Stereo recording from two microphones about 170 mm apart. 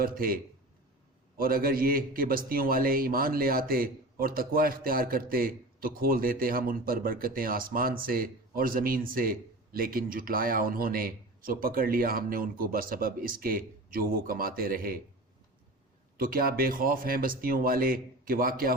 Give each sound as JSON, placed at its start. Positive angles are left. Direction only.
{"t": 0.0, "sound": "a man's voice", "side_deg": -60}
{"t": 1.4, "sound": "a man's voice", "side_deg": -60}
{"t": 16.1, "sound": "a man's voice", "side_deg": -60}